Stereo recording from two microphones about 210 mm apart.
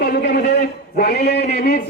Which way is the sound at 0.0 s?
45° left (ahead or behind).